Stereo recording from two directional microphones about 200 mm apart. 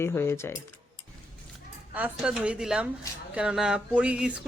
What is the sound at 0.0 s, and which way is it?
Speech, 10° left (ahead or behind).